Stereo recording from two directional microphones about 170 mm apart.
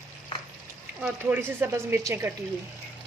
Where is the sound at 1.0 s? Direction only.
10° right (ahead or behind).